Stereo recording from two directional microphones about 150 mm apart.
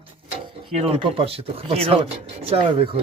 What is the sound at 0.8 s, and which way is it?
Speech, 40° right (ahead or behind).